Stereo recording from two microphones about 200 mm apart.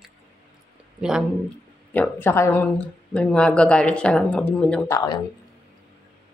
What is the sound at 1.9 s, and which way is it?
Speech, 10° left (ahead or behind).